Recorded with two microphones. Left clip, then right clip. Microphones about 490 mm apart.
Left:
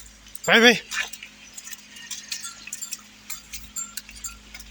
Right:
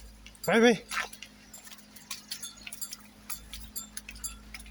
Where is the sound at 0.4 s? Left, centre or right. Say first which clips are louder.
Left 8 dB; right.